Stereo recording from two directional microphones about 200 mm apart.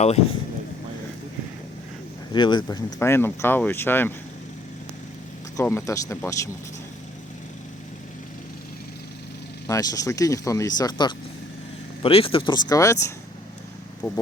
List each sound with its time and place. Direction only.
2.3 s speech: 20° left (ahead or behind)
5.5 s speech: 15° left (ahead or behind)
9.6 s speech: 15° left (ahead or behind)